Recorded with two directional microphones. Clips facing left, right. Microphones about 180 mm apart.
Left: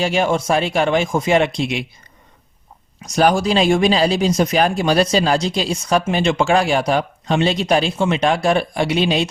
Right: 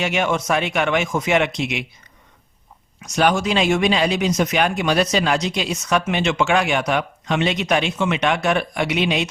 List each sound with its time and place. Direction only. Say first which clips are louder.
0.0 s speech: left 3 dB; 30° left (ahead or behind)
3.0 s speech: left 3 dB; 35° left (ahead or behind)